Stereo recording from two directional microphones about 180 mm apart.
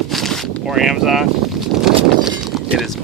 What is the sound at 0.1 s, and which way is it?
Vehicle, centre (ahead or behind).